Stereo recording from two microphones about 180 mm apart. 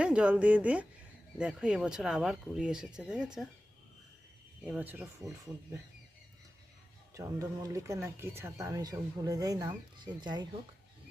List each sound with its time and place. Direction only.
0.0 s speech: 5° right (ahead or behind)
4.6 s speech: 5° right (ahead or behind)
7.1 s speech: 15° right (ahead or behind)